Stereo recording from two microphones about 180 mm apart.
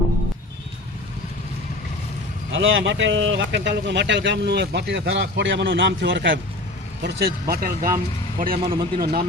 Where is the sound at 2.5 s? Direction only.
90° right.